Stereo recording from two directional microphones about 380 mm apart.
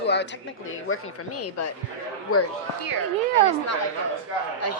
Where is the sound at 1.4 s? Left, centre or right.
Left.